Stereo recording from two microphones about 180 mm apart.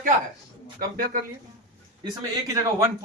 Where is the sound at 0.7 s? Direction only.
55° right (ahead or behind).